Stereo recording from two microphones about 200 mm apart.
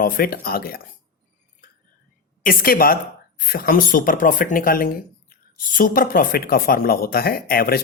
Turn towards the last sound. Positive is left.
turn(degrees=50)  # may be behind; listen again after turning